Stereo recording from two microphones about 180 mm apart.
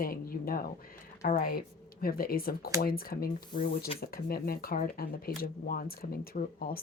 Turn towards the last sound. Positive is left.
turn(degrees=55)  # may be behind; listen again after turning